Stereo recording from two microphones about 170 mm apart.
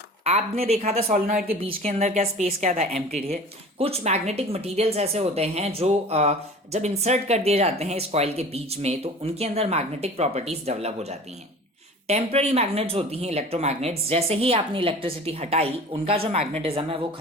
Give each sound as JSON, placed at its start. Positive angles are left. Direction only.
{"t": 0.3, "sound": "a woman's voice", "side_deg": -40}